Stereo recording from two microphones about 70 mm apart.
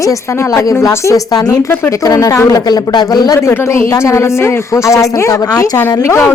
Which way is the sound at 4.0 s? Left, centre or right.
Left.